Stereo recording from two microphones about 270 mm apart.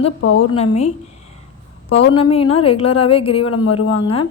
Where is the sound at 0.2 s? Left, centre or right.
Left.